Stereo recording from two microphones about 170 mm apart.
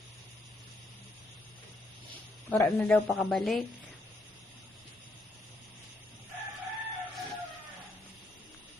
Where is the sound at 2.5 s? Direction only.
15° left (ahead or behind).